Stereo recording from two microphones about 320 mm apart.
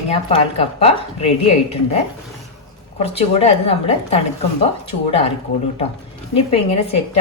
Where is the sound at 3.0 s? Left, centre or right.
Centre.